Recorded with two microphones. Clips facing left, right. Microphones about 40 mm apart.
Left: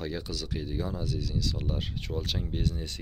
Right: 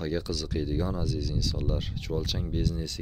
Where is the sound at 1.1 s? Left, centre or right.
Left.